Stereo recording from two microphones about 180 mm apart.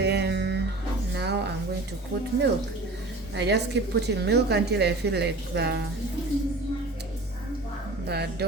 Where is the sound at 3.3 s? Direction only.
70° right (ahead or behind).